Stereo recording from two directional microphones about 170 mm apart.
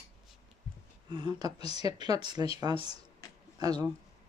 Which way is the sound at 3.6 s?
25° right (ahead or behind).